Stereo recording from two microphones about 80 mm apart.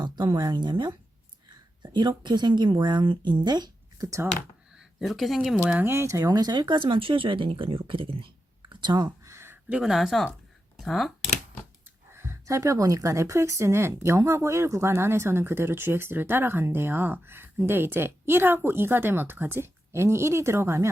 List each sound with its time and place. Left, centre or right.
0.0 s a sound: right
0.5 s speech: right
3.9 s speech: right
4.8 s speech: centre
5.8 s speech: right
6.3 s speech: right
8.7 s a sound: right
9.2 s a sound: right
9.6 s speech: centre
9.9 s speech: centre
12.1 s speech: right